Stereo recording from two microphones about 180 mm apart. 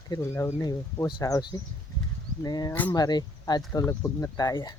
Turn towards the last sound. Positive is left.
turn(degrees=20)  # may be behind; listen again after turning